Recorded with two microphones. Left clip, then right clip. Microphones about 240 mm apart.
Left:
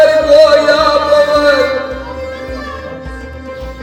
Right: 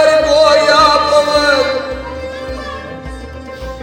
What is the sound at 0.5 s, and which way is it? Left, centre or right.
Music, right.